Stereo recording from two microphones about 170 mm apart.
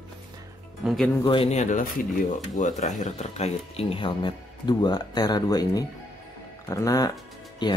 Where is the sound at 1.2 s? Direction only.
35° left (ahead or behind).